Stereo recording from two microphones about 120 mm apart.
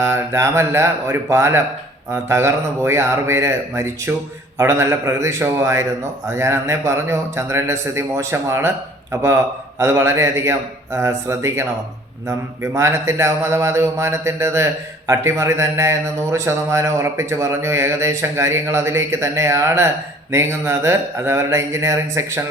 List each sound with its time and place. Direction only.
0.0 s a man's voice: 20° right (ahead or behind)
12.7 s a man's voice: 20° right (ahead or behind)